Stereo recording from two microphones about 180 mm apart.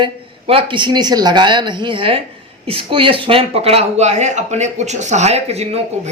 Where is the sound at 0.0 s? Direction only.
30° right (ahead or behind).